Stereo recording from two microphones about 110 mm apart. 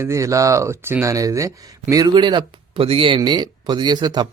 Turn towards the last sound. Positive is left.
turn(degrees=-40)  # may be behind; listen again after turning